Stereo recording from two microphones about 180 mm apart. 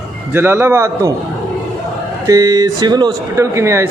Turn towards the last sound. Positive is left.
turn(degrees=-15)  # may be behind; listen again after turning